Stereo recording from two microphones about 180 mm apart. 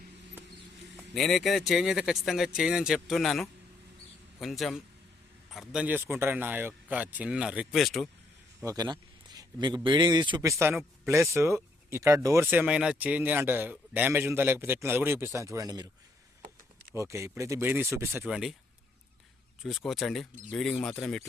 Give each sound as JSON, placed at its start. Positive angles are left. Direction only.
{"t": 0.9, "sound": "a man's voice", "side_deg": 0}
{"t": 8.6, "sound": "speech", "side_deg": -20}
{"t": 16.9, "sound": "speech", "side_deg": -15}
{"t": 19.6, "sound": "speech", "side_deg": 0}